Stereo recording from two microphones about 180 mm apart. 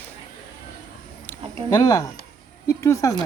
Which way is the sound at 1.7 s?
20° left (ahead or behind).